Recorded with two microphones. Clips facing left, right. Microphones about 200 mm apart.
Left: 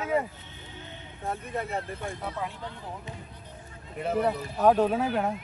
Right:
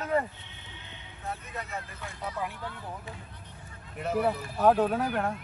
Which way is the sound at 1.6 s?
55° left (ahead or behind).